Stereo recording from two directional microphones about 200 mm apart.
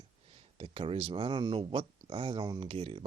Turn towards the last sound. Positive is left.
turn(degrees=-25)  # may be behind; listen again after turning